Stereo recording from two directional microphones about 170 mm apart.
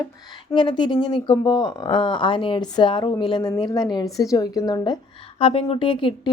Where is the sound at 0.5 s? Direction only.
25° left (ahead or behind).